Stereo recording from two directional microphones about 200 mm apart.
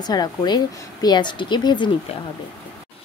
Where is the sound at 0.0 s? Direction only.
20° left (ahead or behind).